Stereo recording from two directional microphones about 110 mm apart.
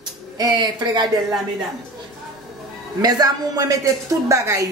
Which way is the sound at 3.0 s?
35° right (ahead or behind).